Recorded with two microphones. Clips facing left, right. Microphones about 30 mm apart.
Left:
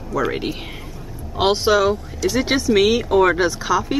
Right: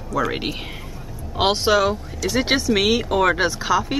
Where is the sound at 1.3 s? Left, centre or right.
Centre.